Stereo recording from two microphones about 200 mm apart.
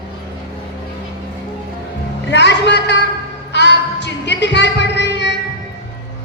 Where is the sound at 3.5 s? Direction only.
60° left (ahead or behind).